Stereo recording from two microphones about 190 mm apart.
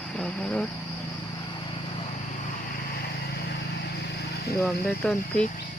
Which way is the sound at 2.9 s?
55° left (ahead or behind).